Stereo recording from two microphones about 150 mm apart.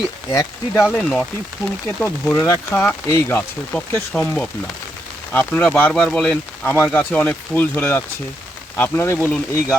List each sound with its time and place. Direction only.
0.3 s speech: 20° left (ahead or behind)
0.9 s speech: centre (ahead or behind)